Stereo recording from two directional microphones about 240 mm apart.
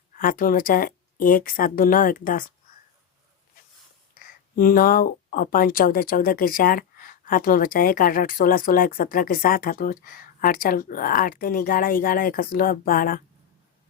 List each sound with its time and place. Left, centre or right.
0.2 s speech: left
4.2 s speech: left